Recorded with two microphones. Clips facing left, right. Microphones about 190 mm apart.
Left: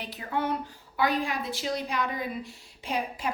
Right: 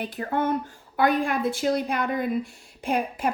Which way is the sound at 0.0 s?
50° right (ahead or behind).